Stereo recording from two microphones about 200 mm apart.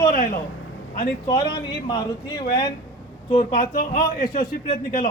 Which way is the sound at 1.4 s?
55° left (ahead or behind).